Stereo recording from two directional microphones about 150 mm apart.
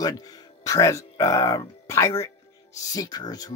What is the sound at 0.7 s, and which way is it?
Speech, 20° left (ahead or behind).